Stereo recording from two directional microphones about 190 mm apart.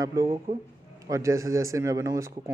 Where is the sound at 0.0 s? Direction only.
15° right (ahead or behind).